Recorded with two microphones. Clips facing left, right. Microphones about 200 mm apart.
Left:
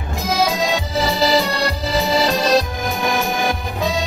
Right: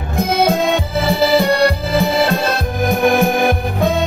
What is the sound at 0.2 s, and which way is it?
Music, 55° right (ahead or behind).